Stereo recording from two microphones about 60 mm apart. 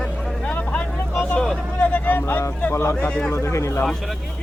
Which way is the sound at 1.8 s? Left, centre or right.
Left.